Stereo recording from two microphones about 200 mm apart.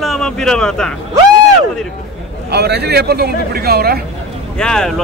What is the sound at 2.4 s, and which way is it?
Speech, 55° right (ahead or behind).